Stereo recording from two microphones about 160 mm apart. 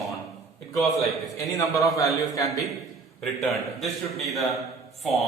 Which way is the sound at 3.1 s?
Centre (ahead or behind).